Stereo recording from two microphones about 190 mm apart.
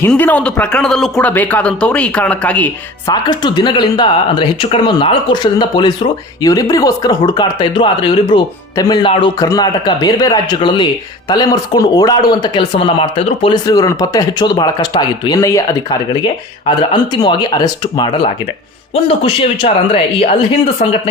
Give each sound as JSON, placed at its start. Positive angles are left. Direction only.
{"t": 0.1, "sound": "speech", "side_deg": 10}
{"t": 3.2, "sound": "speech", "side_deg": 25}